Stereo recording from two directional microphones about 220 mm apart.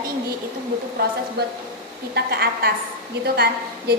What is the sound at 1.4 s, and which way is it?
A woman's voice, 45° right (ahead or behind).